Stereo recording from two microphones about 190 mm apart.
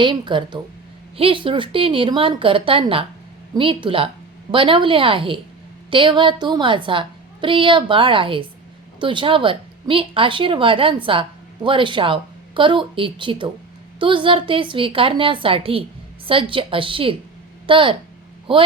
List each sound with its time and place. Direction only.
0.0 s speech: 25° right (ahead or behind)